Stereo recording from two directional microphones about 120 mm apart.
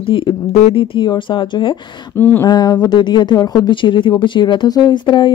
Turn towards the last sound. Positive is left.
turn(degrees=40)  # may be behind; listen again after turning